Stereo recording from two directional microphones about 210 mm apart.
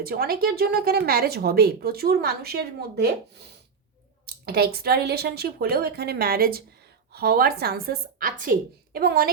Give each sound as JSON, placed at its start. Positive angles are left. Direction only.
{"t": 0.0, "sound": "speech", "side_deg": -45}